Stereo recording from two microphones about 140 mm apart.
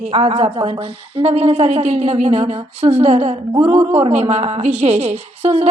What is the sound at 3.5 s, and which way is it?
A woman's voice, 40° right (ahead or behind).